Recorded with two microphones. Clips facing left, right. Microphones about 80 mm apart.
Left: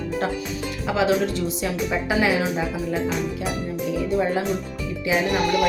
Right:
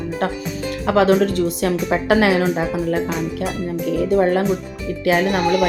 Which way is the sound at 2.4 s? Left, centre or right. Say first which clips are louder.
Right 5 dB; right.